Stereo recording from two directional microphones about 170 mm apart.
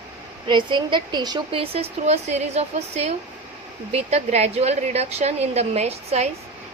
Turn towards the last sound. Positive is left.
turn(degrees=-40)  # may be behind; listen again after turning